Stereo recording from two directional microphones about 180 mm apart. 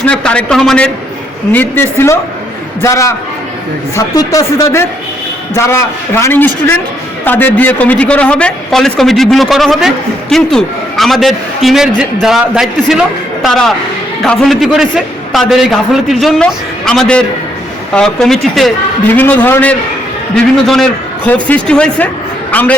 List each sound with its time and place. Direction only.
0.1 s a man's voice: 5° left (ahead or behind)